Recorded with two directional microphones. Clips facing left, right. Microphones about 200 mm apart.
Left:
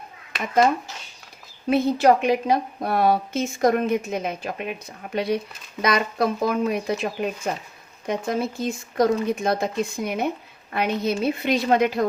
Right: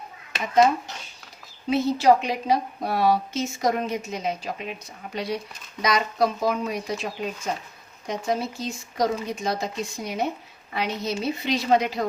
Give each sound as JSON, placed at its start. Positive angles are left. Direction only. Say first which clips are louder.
{"t": 1.7, "sound": "a woman's voice", "louder": "left 1 dB", "side_deg": 55}